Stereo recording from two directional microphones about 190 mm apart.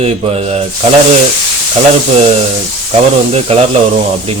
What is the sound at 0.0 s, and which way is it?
Speech, 30° right (ahead or behind).